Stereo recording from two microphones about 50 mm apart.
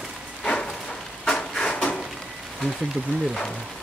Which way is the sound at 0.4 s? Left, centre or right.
Centre.